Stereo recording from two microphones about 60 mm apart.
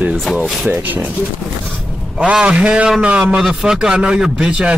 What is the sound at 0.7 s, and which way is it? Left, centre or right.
Speech, right.